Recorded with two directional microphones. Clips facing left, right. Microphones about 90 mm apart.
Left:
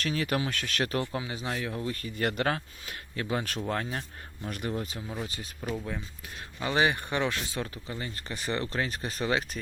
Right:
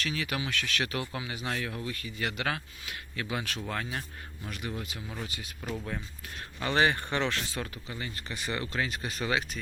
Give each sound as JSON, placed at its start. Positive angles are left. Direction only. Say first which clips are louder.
{"t": 0.0, "sound": "speech", "louder": "left 4 dB", "side_deg": 40}
{"t": 1.8, "sound": "speech", "louder": "left 4 dB", "side_deg": 40}
{"t": 5.0, "sound": "speech", "louder": "left 3 dB", "side_deg": 0}